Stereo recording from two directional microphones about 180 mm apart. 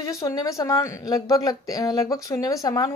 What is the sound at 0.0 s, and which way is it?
Speech, 20° left (ahead or behind).